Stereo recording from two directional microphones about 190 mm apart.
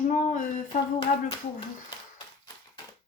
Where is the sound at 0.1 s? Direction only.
45° left (ahead or behind).